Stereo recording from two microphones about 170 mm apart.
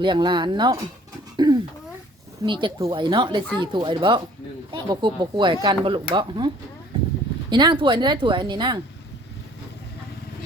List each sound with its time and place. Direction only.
0.0 s speech: 25° right (ahead or behind)
1.4 s throat clearing: 25° right (ahead or behind)
2.4 s speech: 30° right (ahead or behind)
7.5 s speech: 25° right (ahead or behind)